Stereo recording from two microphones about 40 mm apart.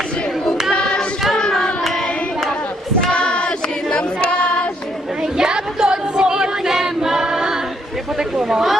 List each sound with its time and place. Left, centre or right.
0.7 s choir: left
3.2 s choir: left
5.4 s choir: centre
8.4 s a woman's voice: centre